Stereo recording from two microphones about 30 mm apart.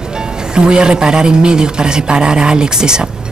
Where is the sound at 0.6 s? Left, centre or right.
Right.